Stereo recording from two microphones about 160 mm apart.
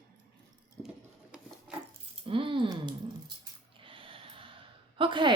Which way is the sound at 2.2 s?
35° right (ahead or behind).